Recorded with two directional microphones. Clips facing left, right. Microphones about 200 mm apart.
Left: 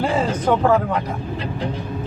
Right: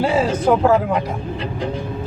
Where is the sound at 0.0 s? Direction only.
5° right (ahead or behind).